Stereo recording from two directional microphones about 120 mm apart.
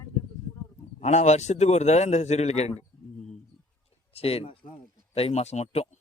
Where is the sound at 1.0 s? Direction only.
70° left (ahead or behind).